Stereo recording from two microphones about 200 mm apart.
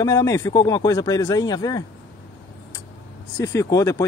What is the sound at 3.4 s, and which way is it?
Speech, 15° left (ahead or behind).